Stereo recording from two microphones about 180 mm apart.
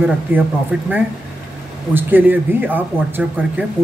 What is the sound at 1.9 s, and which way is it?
Speech, 10° right (ahead or behind).